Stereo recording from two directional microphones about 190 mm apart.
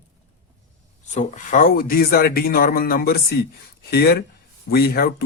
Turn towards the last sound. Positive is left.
turn(degrees=50)  # may be behind; listen again after turning